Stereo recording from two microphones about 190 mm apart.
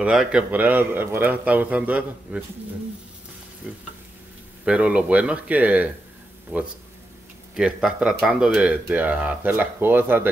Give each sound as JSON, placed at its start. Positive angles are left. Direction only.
{"t": 0.0, "sound": "speech", "side_deg": -5}
{"t": 3.6, "sound": "speech", "side_deg": -5}